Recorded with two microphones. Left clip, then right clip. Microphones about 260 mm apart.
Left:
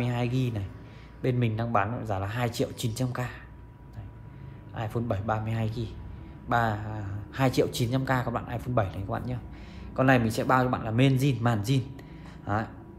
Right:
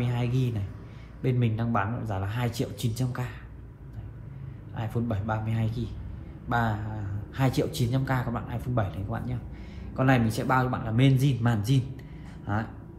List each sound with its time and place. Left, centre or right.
0.0 s speech: left
4.7 s speech: left